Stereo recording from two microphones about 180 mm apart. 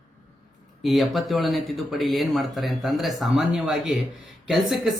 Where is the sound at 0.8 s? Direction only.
Centre (ahead or behind).